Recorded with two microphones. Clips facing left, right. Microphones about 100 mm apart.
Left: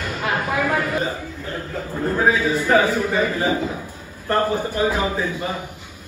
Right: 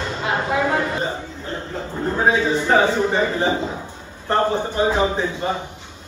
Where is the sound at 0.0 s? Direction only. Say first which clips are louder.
Right 1 dB; 25° right (ahead or behind).